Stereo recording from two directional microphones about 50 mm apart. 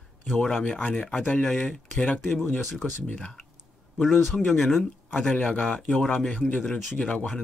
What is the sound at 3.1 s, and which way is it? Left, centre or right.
Speech, centre.